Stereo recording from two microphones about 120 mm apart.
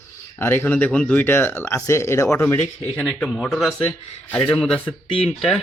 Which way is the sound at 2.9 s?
10° left (ahead or behind).